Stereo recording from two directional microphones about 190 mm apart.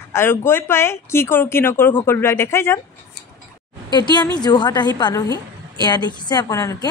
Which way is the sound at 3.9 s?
20° left (ahead or behind).